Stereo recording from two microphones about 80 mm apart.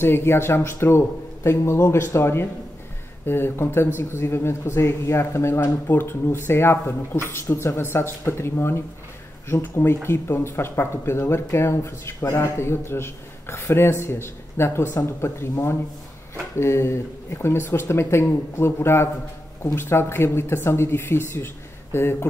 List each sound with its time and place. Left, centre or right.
0.0 s speech: left
10.0 s speech: left